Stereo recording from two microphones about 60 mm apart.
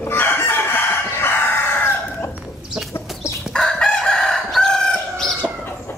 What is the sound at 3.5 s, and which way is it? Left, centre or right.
Crowing, centre.